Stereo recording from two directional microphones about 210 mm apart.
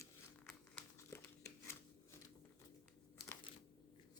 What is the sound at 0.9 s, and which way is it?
Crumpling, 15° left (ahead or behind).